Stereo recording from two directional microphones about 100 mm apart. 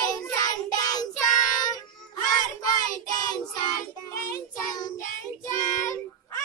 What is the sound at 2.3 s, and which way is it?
Child singing, 40° left (ahead or behind).